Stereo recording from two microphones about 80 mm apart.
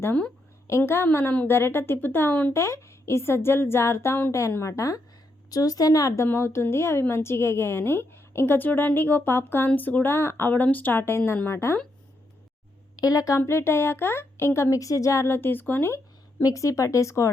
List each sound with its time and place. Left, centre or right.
0.8 s a woman's voice: left
2.5 s speech: left
5.5 s a woman's voice: left
6.2 s a woman's voice: left
13.0 s a woman's voice: left
13.4 s speech: left
16.4 s speech: left